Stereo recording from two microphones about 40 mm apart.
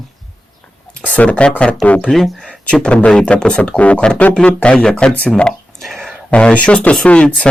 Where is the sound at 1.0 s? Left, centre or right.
Left.